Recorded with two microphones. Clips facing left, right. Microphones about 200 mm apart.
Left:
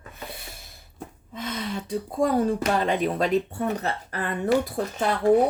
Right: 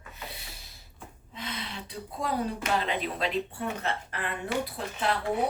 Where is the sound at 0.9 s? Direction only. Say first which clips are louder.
Left 7 dB; 45° left (ahead or behind).